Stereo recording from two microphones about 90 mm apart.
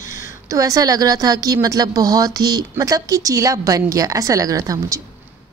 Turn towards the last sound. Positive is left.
turn(degrees=-40)  # may be behind; listen again after turning